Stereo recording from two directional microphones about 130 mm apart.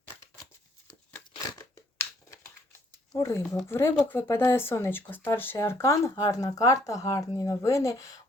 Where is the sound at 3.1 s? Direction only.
20° left (ahead or behind).